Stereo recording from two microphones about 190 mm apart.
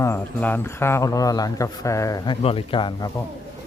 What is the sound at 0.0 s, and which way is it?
Speech, 10° left (ahead or behind).